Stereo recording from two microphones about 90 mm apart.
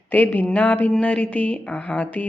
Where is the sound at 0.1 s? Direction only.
20° left (ahead or behind).